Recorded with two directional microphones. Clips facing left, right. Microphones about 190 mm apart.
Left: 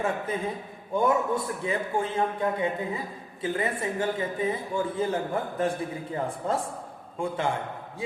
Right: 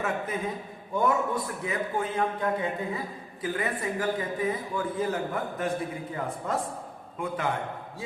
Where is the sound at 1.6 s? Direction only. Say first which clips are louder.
Even; 30° left (ahead or behind).